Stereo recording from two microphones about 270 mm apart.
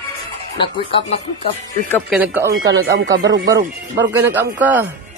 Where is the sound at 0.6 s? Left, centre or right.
Centre.